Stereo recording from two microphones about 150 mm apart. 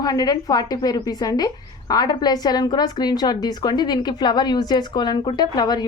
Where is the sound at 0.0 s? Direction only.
25° left (ahead or behind).